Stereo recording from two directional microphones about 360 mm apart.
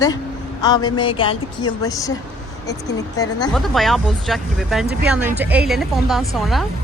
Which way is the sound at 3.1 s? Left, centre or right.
Centre.